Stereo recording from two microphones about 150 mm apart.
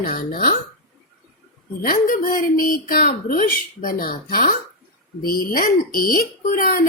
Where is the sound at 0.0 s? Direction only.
75° left (ahead or behind).